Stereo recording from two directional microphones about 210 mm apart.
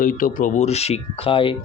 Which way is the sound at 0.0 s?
40° left (ahead or behind).